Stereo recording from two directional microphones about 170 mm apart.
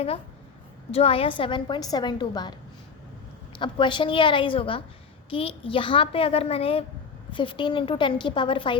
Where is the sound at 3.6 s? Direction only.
30° left (ahead or behind).